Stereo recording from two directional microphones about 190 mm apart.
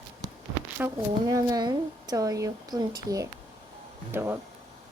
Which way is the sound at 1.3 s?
20° right (ahead or behind).